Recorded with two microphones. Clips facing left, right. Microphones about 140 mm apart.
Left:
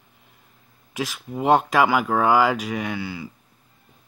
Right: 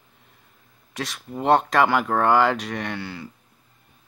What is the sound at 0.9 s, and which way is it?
Speech, 5° left (ahead or behind).